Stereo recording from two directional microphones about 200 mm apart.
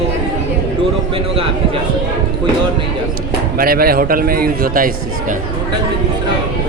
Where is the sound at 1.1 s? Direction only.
30° right (ahead or behind).